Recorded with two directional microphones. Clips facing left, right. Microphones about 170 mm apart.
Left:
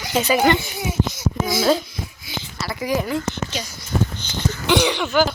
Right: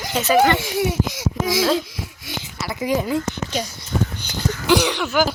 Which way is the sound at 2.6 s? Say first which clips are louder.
Right 1 dB; 20° right (ahead or behind).